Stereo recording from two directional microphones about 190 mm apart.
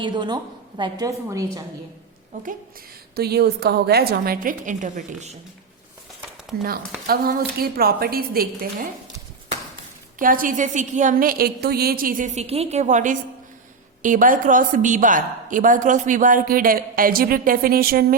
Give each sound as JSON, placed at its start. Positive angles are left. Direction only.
{"t": 0.0, "sound": "a woman's voice", "side_deg": -25}
{"t": 3.2, "sound": "a woman's voice", "side_deg": -55}
{"t": 7.1, "sound": "a woman's voice", "side_deg": -50}
{"t": 10.2, "sound": "a woman's voice", "side_deg": -45}